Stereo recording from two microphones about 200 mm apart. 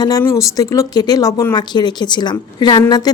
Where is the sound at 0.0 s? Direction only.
15° left (ahead or behind).